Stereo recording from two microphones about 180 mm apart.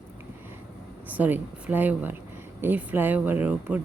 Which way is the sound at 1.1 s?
10° right (ahead or behind).